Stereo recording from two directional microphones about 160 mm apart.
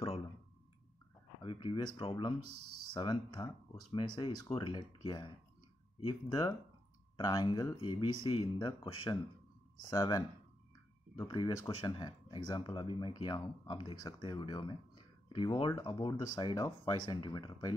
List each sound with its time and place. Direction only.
1.4 s speech: 30° left (ahead or behind)
2.4 s speech: 90° right
3.0 s speech: 30° left (ahead or behind)
11.2 s speech: 30° left (ahead or behind)